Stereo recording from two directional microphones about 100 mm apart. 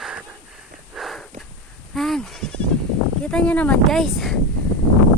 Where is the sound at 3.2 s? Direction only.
10° left (ahead or behind).